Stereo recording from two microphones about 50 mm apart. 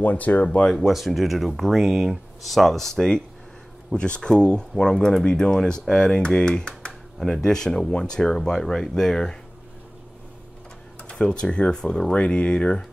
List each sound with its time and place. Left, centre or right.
0.0 s speech: left
0.5 s speech: centre
0.7 s speech: centre
11.0 s speech: left
12.1 s speech: left